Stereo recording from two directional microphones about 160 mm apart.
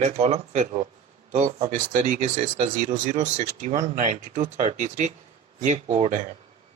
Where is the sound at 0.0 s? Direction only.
45° right (ahead or behind).